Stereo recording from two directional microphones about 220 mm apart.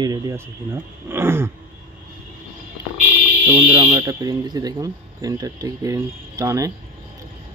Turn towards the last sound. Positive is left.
turn(degrees=-15)  # may be behind; listen again after turning